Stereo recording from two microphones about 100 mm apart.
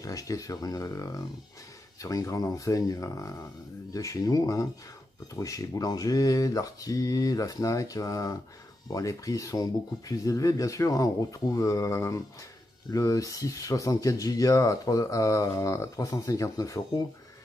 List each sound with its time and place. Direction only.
0.0 s speech: 35° left (ahead or behind)